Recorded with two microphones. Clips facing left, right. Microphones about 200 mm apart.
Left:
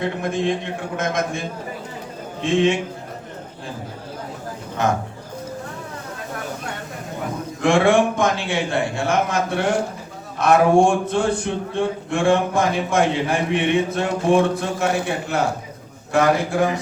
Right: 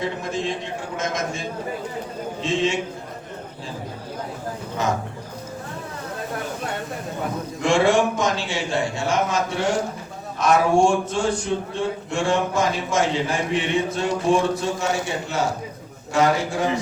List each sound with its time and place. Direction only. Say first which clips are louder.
0.0 s a man's voice: left 4 dB; 55° left (ahead or behind)
2.4 s a man's voice: left 5 dB; 55° left (ahead or behind)
7.6 s a man's voice: left 2 dB; 55° left (ahead or behind)